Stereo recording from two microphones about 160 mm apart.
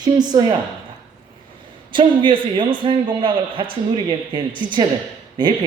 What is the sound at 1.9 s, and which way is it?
A man's voice, 30° right (ahead or behind).